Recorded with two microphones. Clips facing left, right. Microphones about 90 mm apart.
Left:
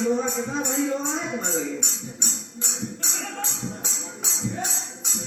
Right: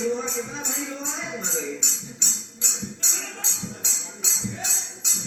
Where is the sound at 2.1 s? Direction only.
45° left (ahead or behind).